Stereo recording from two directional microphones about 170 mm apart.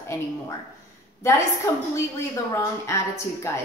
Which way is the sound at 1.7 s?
20° left (ahead or behind).